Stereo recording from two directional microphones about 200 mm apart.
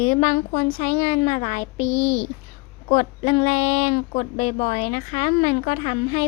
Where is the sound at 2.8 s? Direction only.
35° left (ahead or behind).